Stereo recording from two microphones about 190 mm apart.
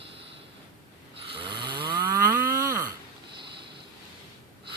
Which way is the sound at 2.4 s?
15° right (ahead or behind).